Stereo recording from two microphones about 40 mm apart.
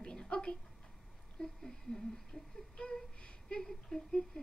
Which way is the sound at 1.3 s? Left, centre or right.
Centre.